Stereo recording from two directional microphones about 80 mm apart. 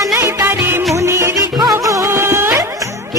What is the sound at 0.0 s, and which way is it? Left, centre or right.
Music, right.